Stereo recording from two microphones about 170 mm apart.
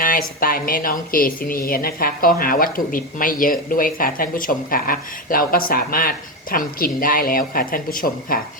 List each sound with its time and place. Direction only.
0.0 s speech: 55° left (ahead or behind)